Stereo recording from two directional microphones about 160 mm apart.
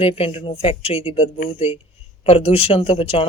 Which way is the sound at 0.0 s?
35° left (ahead or behind).